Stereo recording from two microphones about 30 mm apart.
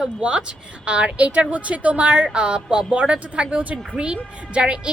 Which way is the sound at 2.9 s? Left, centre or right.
Right.